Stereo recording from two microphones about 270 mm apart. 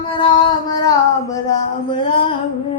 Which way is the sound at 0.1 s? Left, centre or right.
Centre.